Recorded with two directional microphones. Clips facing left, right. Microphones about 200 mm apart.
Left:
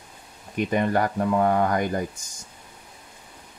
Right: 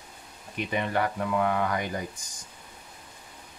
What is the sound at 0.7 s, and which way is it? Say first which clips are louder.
Speech: left 4 dB; 45° left (ahead or behind).